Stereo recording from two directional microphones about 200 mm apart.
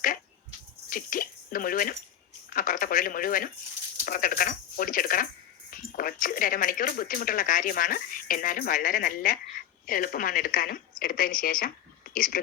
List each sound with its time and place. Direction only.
0.9 s speech: 45° left (ahead or behind)